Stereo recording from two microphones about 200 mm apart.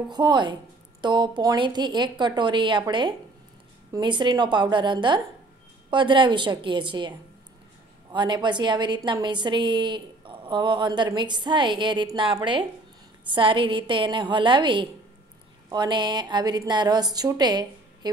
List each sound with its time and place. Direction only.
0.1 s a woman's voice: 20° right (ahead or behind)